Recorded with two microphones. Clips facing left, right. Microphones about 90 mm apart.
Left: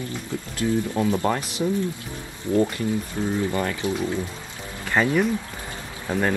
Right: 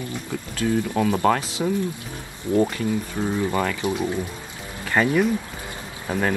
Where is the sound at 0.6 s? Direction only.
15° left (ahead or behind).